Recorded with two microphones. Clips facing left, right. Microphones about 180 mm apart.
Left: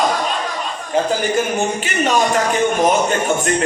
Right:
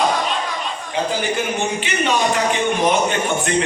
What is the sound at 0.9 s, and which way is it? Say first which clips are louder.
A man's voice: left 4 dB; 45° left (ahead or behind).